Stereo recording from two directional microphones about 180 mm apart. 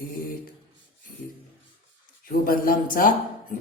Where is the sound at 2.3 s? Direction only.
50° left (ahead or behind).